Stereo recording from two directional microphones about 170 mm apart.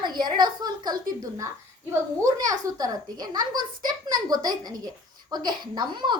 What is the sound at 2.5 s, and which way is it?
A woman's voice, 20° right (ahead or behind).